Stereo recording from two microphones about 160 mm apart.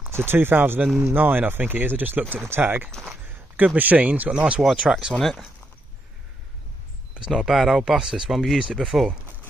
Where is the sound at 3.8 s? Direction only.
10° right (ahead or behind).